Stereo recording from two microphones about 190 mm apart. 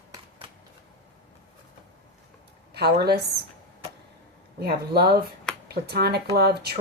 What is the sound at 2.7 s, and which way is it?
Speech, 55° right (ahead or behind).